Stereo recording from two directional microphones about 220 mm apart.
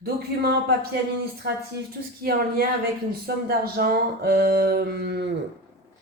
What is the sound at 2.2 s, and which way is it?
Speech, 45° right (ahead or behind).